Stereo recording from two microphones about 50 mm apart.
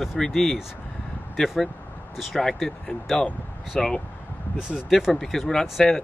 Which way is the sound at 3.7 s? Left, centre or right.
Centre.